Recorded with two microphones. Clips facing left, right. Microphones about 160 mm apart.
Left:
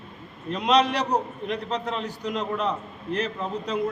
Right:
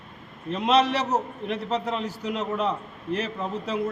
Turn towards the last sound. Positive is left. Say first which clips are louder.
# even
turn(degrees=-5)  # may be behind; listen again after turning